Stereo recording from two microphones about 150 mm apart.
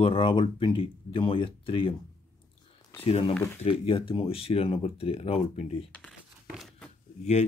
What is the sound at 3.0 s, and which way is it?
Speech, 40° left (ahead or behind).